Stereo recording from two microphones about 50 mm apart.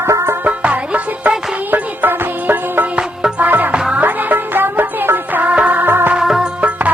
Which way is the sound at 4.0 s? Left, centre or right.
Right.